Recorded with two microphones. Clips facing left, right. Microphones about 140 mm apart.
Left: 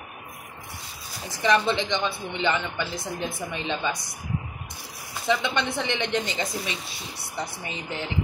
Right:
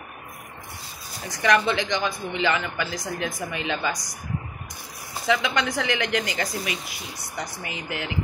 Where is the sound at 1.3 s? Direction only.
25° left (ahead or behind).